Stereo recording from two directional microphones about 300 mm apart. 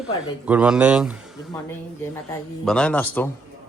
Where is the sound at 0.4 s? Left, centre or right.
Centre.